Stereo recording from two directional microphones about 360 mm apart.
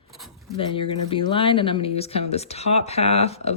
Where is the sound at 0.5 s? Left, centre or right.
Centre.